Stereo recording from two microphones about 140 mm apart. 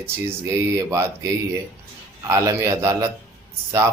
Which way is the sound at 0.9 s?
20° right (ahead or behind).